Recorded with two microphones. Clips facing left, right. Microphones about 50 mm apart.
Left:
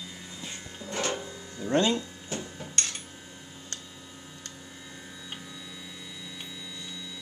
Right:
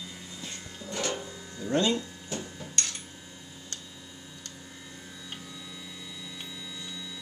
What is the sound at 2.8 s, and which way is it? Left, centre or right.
Cutlery, left.